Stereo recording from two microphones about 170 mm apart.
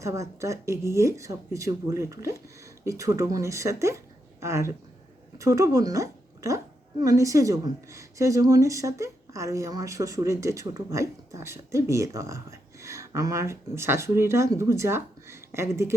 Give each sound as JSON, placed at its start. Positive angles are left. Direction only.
{"t": 0.0, "sound": "a woman's voice", "side_deg": -15}